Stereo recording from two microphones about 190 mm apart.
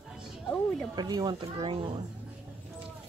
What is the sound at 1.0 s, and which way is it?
Speech, 20° right (ahead or behind).